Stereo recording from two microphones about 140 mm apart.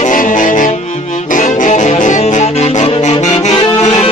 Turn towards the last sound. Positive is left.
turn(degrees=50)  # may be behind; listen again after turning